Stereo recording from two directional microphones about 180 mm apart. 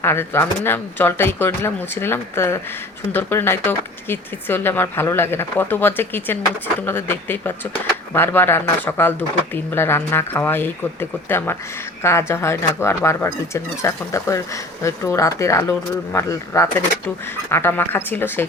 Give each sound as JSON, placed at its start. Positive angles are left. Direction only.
{"t": 0.0, "sound": "speech", "side_deg": 15}